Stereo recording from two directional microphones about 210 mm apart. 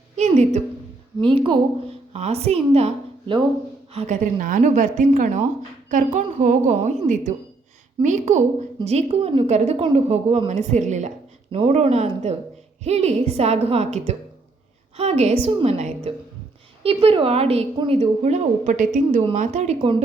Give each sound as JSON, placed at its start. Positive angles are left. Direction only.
{"t": 0.2, "sound": "a woman's voice", "side_deg": -30}
{"t": 8.0, "sound": "a woman's voice", "side_deg": -35}